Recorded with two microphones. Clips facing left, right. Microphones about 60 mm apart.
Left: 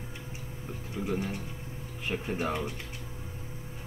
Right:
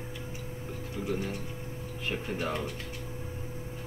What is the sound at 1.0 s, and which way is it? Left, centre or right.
Speech, left.